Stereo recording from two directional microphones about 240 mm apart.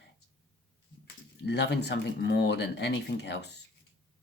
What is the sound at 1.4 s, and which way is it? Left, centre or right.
Speech, left.